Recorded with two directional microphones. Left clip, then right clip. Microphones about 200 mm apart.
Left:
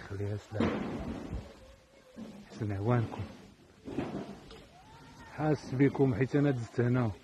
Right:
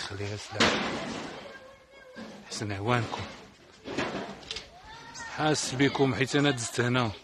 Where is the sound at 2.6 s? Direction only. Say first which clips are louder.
Right 4 dB; 10° right (ahead or behind).